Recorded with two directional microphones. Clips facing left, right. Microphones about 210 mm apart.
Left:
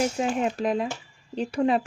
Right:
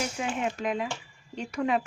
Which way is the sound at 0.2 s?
40° left (ahead or behind).